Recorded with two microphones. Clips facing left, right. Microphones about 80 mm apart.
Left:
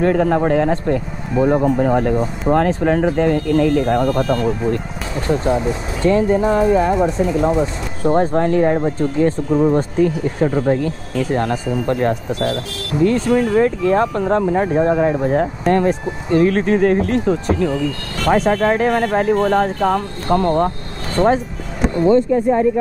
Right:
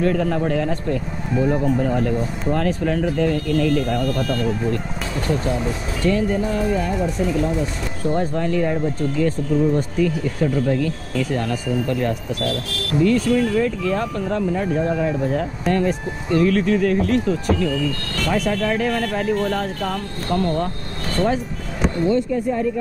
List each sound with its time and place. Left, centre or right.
0.0 s speech: left
21.9 s speech: left